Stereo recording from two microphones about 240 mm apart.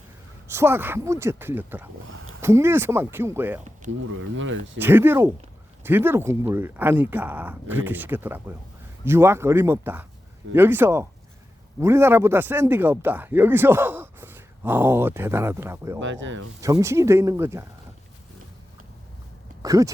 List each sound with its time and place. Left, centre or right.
0.4 s speech: centre
4.0 s speech: right
4.8 s speech: centre
16.0 s speech: right
16.6 s speech: centre
19.6 s speech: centre